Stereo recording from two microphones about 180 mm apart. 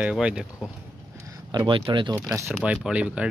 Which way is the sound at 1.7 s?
30° right (ahead or behind).